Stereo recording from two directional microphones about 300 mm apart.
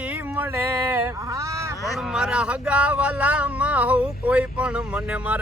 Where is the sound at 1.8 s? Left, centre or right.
Centre.